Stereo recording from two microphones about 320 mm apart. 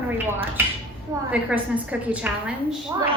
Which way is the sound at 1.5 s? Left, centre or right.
Centre.